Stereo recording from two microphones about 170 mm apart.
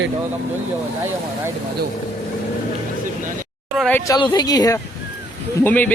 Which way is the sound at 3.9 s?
10° left (ahead or behind).